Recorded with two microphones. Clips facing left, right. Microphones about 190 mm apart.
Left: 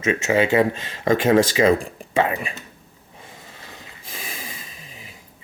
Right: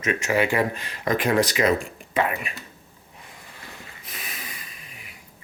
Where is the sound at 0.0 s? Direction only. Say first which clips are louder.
Left 3 dB; 25° left (ahead or behind).